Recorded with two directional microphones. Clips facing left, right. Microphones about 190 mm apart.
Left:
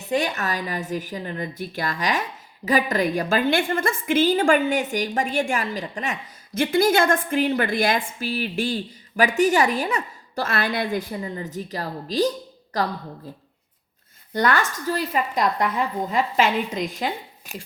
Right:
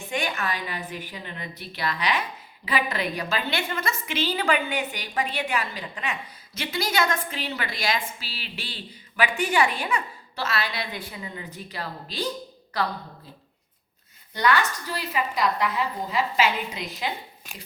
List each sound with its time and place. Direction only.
0.0 s a woman's voice: 40° left (ahead or behind)
14.3 s a woman's voice: 45° left (ahead or behind)